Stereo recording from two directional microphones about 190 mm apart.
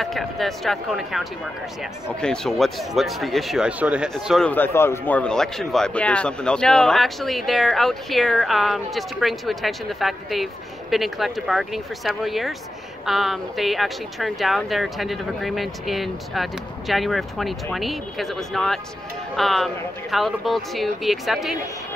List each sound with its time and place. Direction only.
0.0 s speech: centre (ahead or behind)